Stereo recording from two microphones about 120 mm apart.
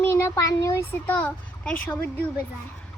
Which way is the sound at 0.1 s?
25° left (ahead or behind).